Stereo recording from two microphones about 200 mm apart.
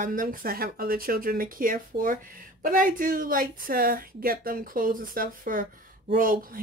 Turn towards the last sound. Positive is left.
turn(degrees=-45)  # may be behind; listen again after turning